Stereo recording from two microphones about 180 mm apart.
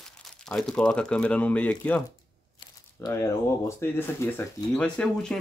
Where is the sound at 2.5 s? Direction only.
20° left (ahead or behind).